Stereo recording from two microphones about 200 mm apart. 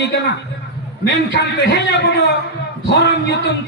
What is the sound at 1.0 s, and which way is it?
A man's voice, 60° left (ahead or behind).